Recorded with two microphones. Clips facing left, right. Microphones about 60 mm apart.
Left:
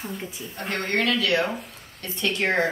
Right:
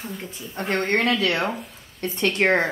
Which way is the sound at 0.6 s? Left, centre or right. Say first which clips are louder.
Right 3 dB; right.